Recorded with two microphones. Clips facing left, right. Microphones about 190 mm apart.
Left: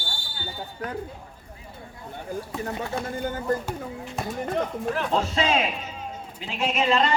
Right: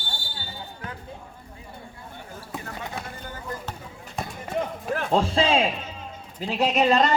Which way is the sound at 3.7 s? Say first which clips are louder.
Left 7 dB; centre (ahead or behind).